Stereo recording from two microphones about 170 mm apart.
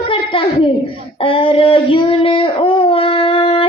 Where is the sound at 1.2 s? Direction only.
30° left (ahead or behind).